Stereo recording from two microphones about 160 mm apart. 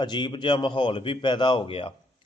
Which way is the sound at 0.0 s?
30° left (ahead or behind).